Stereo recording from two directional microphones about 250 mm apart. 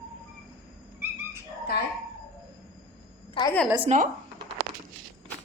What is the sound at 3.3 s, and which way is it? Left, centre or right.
Speech, centre.